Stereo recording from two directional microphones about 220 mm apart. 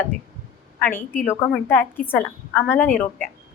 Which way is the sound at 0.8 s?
10° left (ahead or behind).